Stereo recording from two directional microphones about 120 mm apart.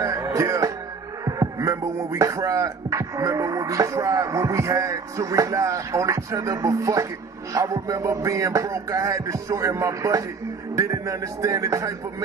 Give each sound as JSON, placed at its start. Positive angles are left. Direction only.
{"t": 0.0, "sound": "music", "side_deg": -30}